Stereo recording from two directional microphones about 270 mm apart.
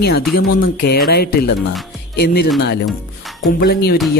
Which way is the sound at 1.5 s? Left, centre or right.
Centre.